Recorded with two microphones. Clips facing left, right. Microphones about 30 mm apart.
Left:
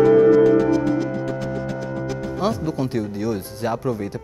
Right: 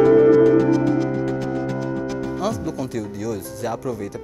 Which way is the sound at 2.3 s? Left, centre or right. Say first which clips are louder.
Left 2 dB; left.